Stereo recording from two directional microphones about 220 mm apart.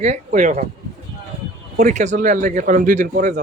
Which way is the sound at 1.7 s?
35° right (ahead or behind).